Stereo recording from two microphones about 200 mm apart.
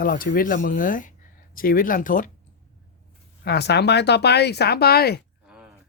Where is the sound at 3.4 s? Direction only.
55° left (ahead or behind).